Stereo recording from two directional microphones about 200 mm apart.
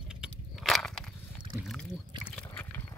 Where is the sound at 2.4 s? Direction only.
10° left (ahead or behind).